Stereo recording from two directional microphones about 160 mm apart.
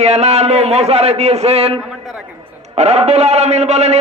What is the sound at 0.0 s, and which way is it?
A man's voice, 40° right (ahead or behind).